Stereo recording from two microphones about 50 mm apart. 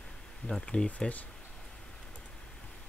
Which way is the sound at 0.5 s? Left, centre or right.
Centre.